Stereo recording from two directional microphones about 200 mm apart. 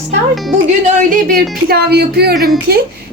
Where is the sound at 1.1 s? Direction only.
45° right (ahead or behind).